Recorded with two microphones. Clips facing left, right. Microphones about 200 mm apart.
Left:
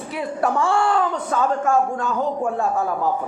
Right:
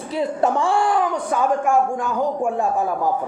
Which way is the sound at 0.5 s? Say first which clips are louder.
Even; 15° right (ahead or behind).